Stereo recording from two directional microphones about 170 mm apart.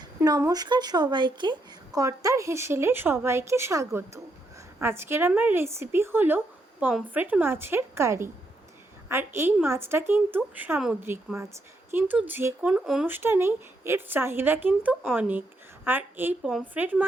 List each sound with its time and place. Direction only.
0.2 s a woman's voice: 20° right (ahead or behind)